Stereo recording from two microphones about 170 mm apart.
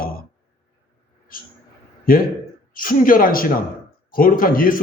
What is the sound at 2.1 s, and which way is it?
A man's voice, 55° left (ahead or behind).